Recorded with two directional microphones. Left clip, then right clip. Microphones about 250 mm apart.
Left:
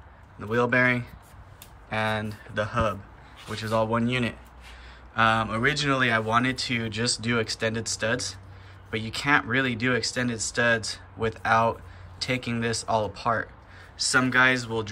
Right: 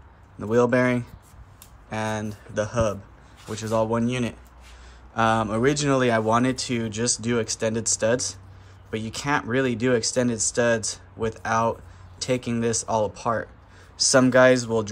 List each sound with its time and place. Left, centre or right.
0.4 s speech: centre